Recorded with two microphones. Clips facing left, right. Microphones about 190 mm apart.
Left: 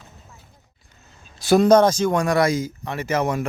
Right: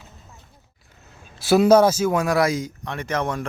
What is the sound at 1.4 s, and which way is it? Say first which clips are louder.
Speech: even; 5° right (ahead or behind).